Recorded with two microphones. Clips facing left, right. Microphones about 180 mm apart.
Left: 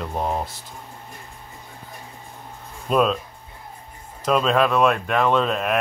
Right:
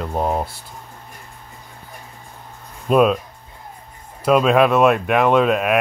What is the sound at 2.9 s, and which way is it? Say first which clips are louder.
Speech: right 5 dB; 10° right (ahead or behind).